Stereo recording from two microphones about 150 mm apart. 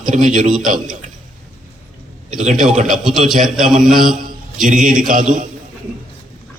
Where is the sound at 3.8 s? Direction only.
60° right (ahead or behind).